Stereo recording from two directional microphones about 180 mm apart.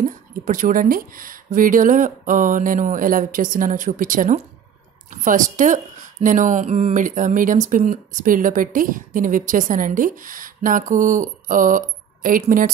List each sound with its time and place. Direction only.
0.0 s a woman's voice: 50° right (ahead or behind)